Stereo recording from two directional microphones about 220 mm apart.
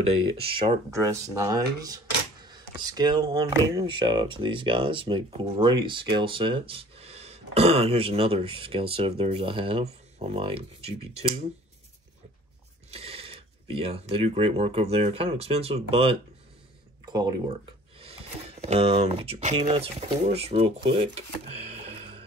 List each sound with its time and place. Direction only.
0.4 s speech: 25° right (ahead or behind)
12.9 s speech: 25° right (ahead or behind)